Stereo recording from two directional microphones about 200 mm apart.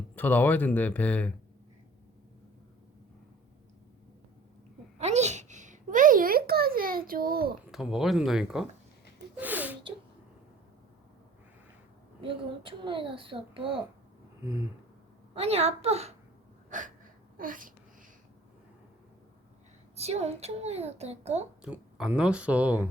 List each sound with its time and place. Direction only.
0.2 s speech: 10° left (ahead or behind)
4.9 s a sound: 35° right (ahead or behind)
7.7 s speech: centre (ahead or behind)
9.3 s a sound: 10° right (ahead or behind)
12.2 s a child's voice: 25° right (ahead or behind)
15.4 s a woman's voice: 30° right (ahead or behind)
16.6 s a sound: 40° right (ahead or behind)
17.3 s speech: 45° right (ahead or behind)
20.0 s a woman's voice: 30° right (ahead or behind)
21.6 s speech: 5° right (ahead or behind)